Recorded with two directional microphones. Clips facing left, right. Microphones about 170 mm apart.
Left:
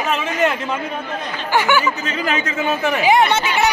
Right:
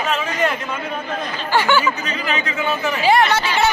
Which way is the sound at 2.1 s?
45° left (ahead or behind).